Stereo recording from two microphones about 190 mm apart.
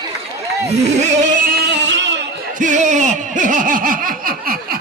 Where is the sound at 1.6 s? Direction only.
70° right (ahead or behind).